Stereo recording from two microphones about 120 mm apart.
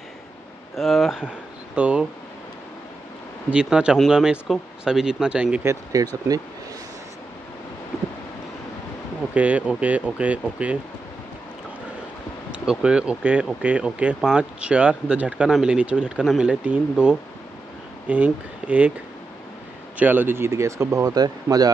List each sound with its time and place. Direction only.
0.7 s speech: centre (ahead or behind)
3.5 s speech: 10° right (ahead or behind)
5.6 s speech: 25° right (ahead or behind)
9.3 s speech: 10° right (ahead or behind)
12.4 s speech: 10° right (ahead or behind)
20.0 s speech: 15° right (ahead or behind); by 21.6 s 35° right (ahead or behind)